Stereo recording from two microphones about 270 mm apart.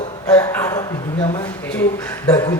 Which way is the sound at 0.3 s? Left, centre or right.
Centre.